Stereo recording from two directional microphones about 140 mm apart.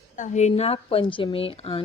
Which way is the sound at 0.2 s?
55° left (ahead or behind).